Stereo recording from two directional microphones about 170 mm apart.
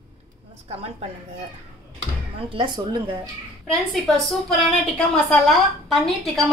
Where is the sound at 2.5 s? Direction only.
25° right (ahead or behind).